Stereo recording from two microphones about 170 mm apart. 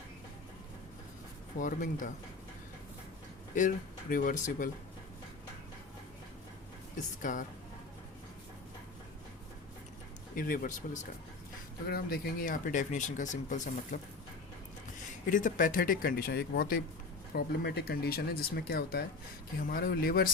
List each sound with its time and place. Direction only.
1.5 s speech: 50° left (ahead or behind)
4.1 s speech: 55° left (ahead or behind)
6.9 s speech: 50° left (ahead or behind)
10.3 s speech: 55° left (ahead or behind)
11.9 s speech: 65° left (ahead or behind); by 14.0 s 50° left (ahead or behind)
15.1 s speech: 50° left (ahead or behind)